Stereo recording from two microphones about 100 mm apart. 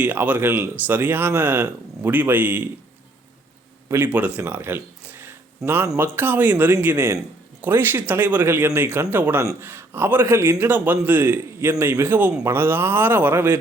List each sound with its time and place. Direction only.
0.0 s speech: 15° right (ahead or behind)
3.8 s speech: 20° right (ahead or behind)
4.4 s a sound: 20° right (ahead or behind)
6.0 s speech: 20° right (ahead or behind)
9.4 s speech: 30° right (ahead or behind)